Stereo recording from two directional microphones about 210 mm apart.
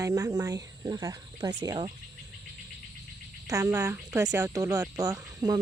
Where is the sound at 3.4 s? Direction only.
15° right (ahead or behind).